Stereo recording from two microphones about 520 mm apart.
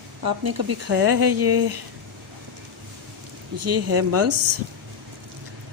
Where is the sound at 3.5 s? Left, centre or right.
Right.